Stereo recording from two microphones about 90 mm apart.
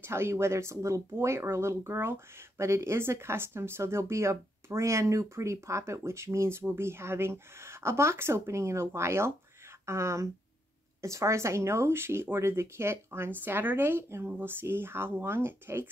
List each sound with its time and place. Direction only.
0.0 s speech: 30° right (ahead or behind)